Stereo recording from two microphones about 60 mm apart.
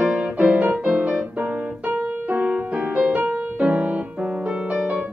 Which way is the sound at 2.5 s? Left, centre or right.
Centre.